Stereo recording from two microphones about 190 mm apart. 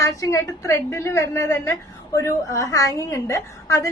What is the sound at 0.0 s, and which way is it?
A woman's voice, 15° left (ahead or behind).